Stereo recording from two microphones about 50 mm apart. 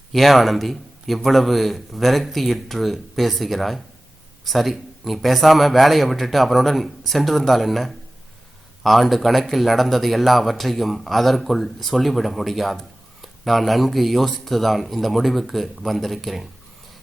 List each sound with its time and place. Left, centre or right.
0.1 s speech: centre